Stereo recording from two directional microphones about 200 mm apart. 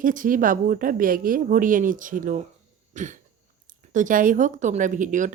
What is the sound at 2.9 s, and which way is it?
Throat clearing, 40° right (ahead or behind).